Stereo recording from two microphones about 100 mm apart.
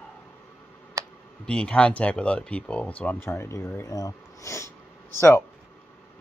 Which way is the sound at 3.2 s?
25° left (ahead or behind).